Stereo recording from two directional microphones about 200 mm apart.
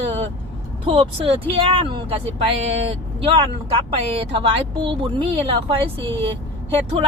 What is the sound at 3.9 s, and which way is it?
Speech, 25° right (ahead or behind).